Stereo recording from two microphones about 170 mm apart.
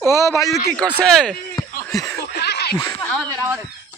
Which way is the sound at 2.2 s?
75° left (ahead or behind).